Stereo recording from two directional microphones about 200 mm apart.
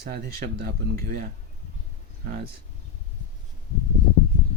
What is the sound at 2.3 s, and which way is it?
Speech, 55° right (ahead or behind).